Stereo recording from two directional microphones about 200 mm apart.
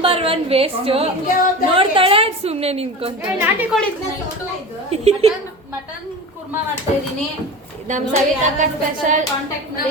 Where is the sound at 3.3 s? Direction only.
10° right (ahead or behind).